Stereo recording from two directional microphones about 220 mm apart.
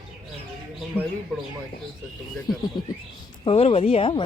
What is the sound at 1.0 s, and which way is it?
Speech, 10° right (ahead or behind).